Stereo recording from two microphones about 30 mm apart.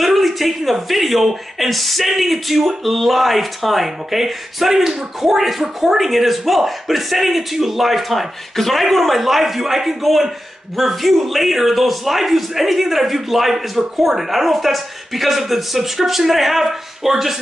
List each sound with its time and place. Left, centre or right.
0.0 s a man's voice: centre